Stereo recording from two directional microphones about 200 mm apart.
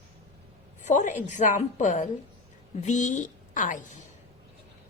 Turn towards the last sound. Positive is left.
turn(degrees=40)  # may be behind; listen again after turning